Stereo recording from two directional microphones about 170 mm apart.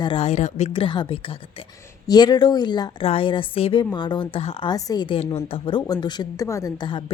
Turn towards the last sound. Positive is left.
turn(degrees=30)  # may be behind; listen again after turning